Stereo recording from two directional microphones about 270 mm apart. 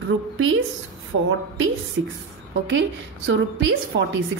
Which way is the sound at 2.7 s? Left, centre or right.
Right.